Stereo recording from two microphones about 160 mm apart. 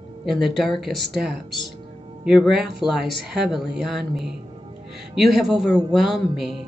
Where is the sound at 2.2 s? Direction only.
Centre (ahead or behind).